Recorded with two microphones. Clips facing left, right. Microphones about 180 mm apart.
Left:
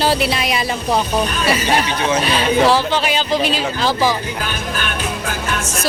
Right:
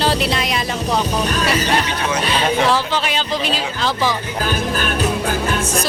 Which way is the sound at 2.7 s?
5° left (ahead or behind).